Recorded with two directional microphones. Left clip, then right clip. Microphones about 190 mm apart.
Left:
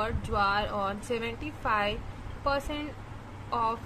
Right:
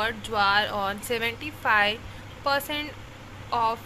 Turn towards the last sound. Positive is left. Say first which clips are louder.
# right 4 dB
turn(degrees=0)  # may be behind; listen again after turning